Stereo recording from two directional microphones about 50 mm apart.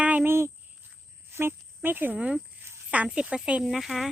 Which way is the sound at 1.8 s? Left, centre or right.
Right.